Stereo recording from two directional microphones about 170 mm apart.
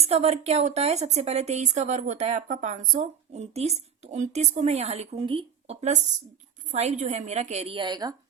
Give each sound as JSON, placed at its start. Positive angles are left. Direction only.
{"t": 0.0, "sound": "a woman's voice", "side_deg": -40}